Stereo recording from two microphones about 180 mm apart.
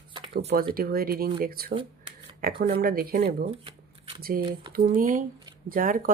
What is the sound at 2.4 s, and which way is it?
Speech, 50° right (ahead or behind).